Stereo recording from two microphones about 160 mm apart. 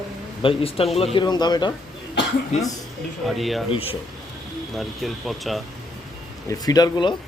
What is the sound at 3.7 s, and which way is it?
Speech, 35° left (ahead or behind).